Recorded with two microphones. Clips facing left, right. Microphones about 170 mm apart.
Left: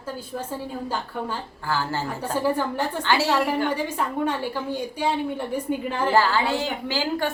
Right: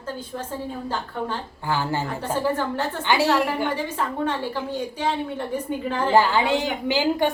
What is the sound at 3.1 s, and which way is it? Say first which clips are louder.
Speech: right 2 dB; 15° right (ahead or behind).